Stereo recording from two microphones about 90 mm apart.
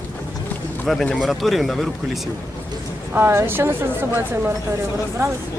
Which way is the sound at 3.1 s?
25° right (ahead or behind).